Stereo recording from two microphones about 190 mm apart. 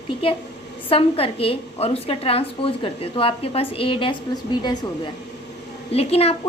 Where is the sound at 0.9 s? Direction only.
30° left (ahead or behind).